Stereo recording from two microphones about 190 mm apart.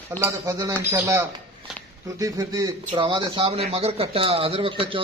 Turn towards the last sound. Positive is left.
turn(degrees=-30)  # may be behind; listen again after turning